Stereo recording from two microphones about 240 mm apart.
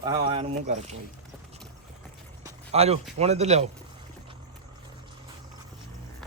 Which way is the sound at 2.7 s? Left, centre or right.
Right.